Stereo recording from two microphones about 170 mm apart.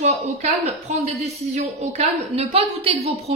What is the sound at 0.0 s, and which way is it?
Speech, 40° right (ahead or behind).